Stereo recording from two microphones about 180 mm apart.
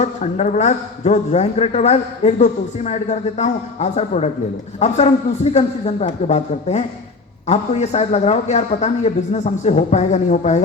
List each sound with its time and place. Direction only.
0.0 s speech: 40° left (ahead or behind)